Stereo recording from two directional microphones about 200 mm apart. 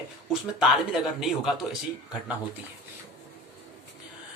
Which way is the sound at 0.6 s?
5° right (ahead or behind).